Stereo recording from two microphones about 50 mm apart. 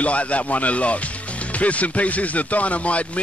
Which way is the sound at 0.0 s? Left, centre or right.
Left.